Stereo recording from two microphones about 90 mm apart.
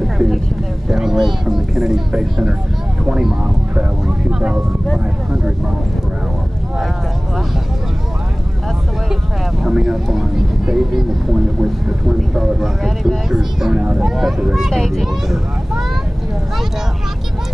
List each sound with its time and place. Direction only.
0.0 s vehicle: centre (ahead or behind)
0.8 s speech: 5° right (ahead or behind)
9.1 s speech: 5° right (ahead or behind)
12.2 s speech: 5° right (ahead or behind)